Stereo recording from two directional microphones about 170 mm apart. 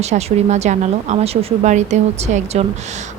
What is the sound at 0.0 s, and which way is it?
A woman's voice, 40° right (ahead or behind).